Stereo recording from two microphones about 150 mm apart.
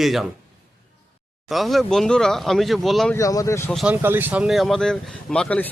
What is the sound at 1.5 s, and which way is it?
Speech, centre (ahead or behind).